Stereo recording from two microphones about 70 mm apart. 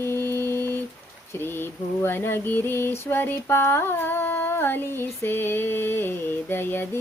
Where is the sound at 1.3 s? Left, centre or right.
Left.